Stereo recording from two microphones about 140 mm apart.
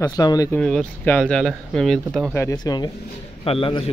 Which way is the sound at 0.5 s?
5° left (ahead or behind).